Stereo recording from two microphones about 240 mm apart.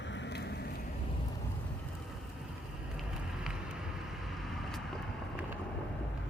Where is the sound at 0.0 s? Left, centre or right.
Left.